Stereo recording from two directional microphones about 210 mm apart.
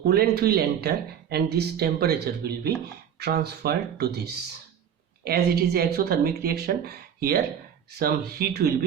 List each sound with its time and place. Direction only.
0.0 s speech: 50° right (ahead or behind)